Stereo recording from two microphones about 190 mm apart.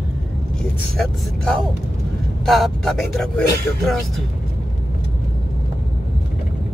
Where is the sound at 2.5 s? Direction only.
Centre (ahead or behind).